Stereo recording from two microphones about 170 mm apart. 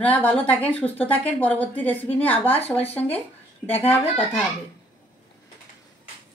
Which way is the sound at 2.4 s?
35° left (ahead or behind).